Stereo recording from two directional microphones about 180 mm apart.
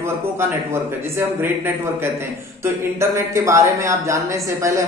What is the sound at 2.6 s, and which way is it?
Speech, 15° right (ahead or behind).